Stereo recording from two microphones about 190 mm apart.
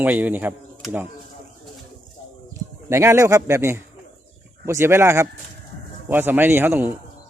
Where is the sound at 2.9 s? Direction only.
15° right (ahead or behind).